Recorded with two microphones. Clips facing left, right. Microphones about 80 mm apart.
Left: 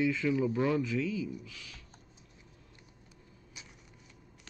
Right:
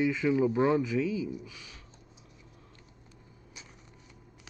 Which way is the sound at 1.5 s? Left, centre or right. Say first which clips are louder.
Right 1 dB; right.